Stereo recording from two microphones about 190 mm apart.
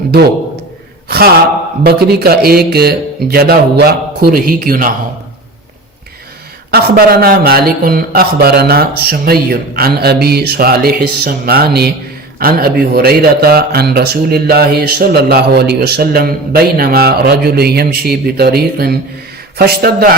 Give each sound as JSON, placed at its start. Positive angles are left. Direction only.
{"t": 1.0, "sound": "gasp", "side_deg": -55}
{"t": 1.8, "sound": "speech", "side_deg": -55}
{"t": 6.7, "sound": "speech", "side_deg": -55}